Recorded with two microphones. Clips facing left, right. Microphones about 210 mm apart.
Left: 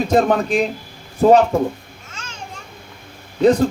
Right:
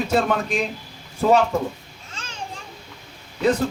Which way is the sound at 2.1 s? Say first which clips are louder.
Left 1 dB; 30° right (ahead or behind).